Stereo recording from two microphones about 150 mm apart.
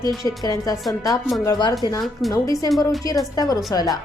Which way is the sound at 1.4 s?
25° left (ahead or behind).